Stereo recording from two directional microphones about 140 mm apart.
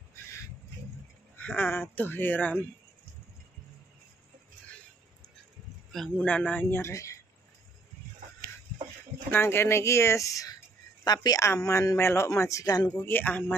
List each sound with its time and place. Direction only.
1.3 s speech: 15° left (ahead or behind)
5.9 s speech: centre (ahead or behind); by 7.2 s 20° left (ahead or behind)
9.3 s speech: 15° left (ahead or behind)
12.8 s speech: 10° left (ahead or behind)